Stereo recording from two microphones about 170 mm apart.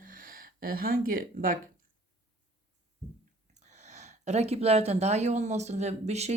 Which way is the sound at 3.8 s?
45° right (ahead or behind).